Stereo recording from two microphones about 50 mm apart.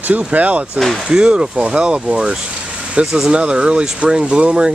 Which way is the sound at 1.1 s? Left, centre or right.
Centre.